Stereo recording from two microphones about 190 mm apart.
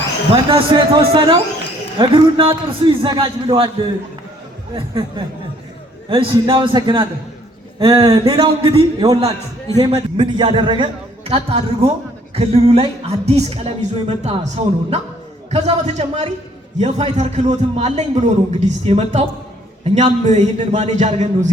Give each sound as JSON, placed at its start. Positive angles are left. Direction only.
{"t": 0.5, "sound": "a man's voice", "side_deg": -25}
{"t": 4.7, "sound": "a man's voice", "side_deg": -25}